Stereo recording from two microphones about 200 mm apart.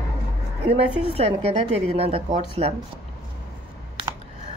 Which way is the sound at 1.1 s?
30° right (ahead or behind).